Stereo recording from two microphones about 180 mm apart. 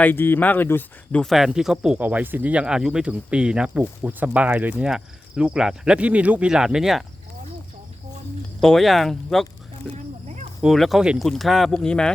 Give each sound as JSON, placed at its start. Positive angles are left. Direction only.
{"t": 0.0, "sound": "speech", "side_deg": 10}
{"t": 8.6, "sound": "speech", "side_deg": 0}
{"t": 9.9, "sound": "snake", "side_deg": -35}
{"t": 10.6, "sound": "speech", "side_deg": 0}